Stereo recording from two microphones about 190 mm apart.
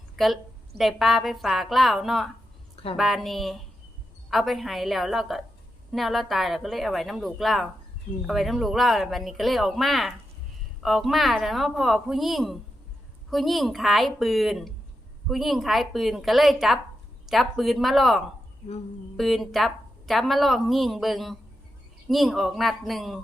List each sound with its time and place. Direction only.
0.2 s a woman's voice: centre (ahead or behind)